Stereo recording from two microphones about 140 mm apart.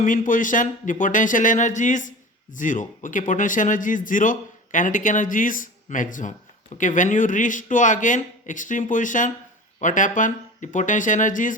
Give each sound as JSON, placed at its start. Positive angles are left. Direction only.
{"t": 0.0, "sound": "speech", "side_deg": 70}